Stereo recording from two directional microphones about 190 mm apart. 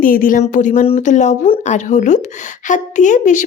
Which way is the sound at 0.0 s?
45° left (ahead or behind).